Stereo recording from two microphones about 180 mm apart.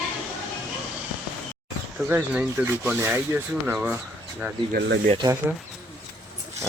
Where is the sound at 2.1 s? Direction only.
5° right (ahead or behind).